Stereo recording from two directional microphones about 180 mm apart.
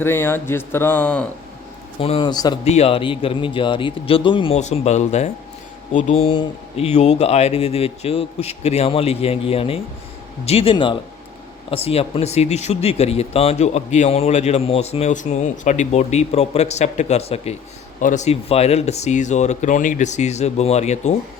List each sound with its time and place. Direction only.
0.0 s speech: 15° left (ahead or behind)
2.0 s speech: 30° left (ahead or behind)
2.6 s speech: 35° left (ahead or behind)